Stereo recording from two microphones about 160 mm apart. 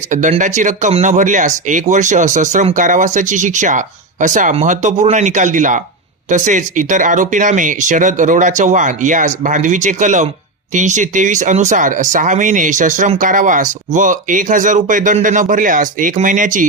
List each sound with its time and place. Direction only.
0.1 s speech: 50° right (ahead or behind)